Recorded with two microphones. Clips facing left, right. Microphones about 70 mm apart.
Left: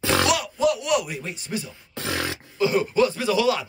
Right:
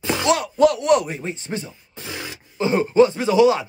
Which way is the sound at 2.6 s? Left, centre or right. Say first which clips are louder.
Right 4 dB; right.